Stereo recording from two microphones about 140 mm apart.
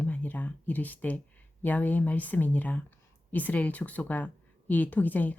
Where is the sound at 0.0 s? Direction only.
10° left (ahead or behind).